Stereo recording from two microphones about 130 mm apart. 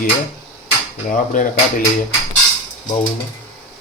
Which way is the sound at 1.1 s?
90° left.